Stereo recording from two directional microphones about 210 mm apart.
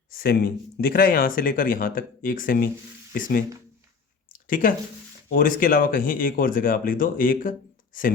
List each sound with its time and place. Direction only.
0.1 s speech: 45° left (ahead or behind)
4.4 s speech: 40° left (ahead or behind)